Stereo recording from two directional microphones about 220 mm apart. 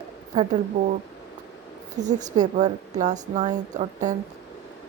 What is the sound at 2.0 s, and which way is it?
Speech, 35° right (ahead or behind).